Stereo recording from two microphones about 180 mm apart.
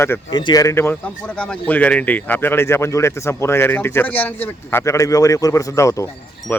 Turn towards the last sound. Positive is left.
turn(degrees=15)  # may be behind; listen again after turning